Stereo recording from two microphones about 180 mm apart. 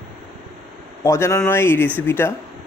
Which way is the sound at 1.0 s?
15° left (ahead or behind).